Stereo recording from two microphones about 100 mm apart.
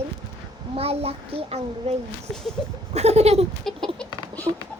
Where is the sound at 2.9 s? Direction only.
90° right.